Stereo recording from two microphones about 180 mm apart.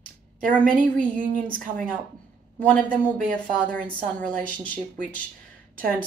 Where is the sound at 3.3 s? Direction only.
5° left (ahead or behind).